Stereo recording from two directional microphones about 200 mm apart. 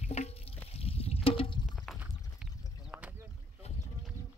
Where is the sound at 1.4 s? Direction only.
25° left (ahead or behind).